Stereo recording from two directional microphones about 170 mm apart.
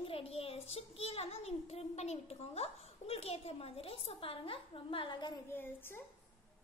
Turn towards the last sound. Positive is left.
turn(degrees=10)  # may be behind; listen again after turning